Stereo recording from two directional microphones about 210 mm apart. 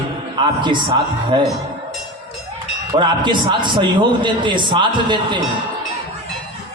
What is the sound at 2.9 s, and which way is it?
A man's voice, 20° right (ahead or behind).